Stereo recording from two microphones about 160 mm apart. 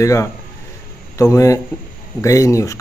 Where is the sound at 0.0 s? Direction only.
20° left (ahead or behind).